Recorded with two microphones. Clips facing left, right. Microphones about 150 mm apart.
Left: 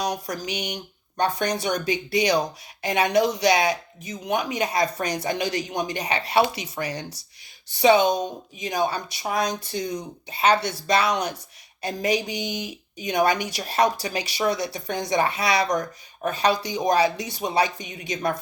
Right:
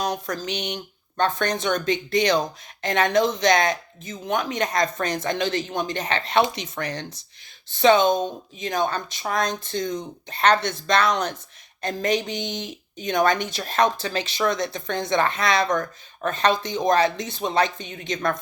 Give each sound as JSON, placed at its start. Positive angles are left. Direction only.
{"t": 0.0, "sound": "speech", "side_deg": 15}